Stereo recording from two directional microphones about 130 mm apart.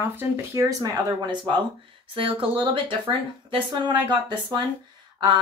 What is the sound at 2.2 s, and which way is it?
Speech, 45° right (ahead or behind).